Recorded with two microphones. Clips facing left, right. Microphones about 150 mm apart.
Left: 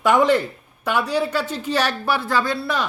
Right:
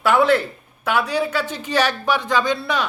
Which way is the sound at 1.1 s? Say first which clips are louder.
Even; 10° right (ahead or behind).